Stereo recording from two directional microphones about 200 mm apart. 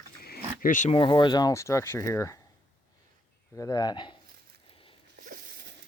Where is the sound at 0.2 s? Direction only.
50° left (ahead or behind).